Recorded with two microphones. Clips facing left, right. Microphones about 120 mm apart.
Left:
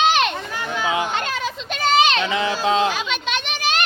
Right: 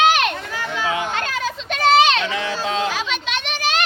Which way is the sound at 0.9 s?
20° left (ahead or behind).